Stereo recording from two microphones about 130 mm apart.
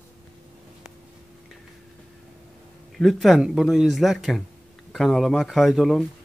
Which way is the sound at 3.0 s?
Centre (ahead or behind).